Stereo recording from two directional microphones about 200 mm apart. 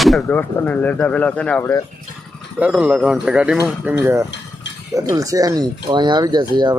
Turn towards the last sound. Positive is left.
turn(degrees=-20)  # may be behind; listen again after turning